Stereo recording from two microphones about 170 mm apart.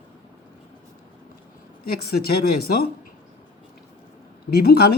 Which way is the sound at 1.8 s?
65° left (ahead or behind).